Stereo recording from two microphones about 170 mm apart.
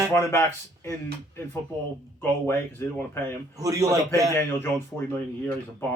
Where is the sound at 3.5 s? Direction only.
20° right (ahead or behind).